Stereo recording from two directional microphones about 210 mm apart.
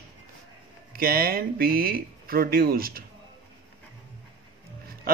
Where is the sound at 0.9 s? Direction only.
45° right (ahead or behind).